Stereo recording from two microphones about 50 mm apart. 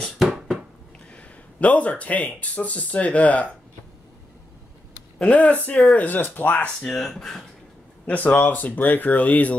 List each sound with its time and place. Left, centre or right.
1.1 s speech: left
5.2 s speech: left
6.6 s speech: left
7.1 s speech: centre
8.1 s speech: left